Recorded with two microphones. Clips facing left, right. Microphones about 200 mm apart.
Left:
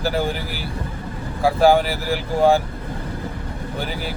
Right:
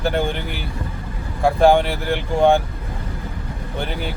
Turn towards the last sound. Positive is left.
turn(degrees=5)  # may be behind; listen again after turning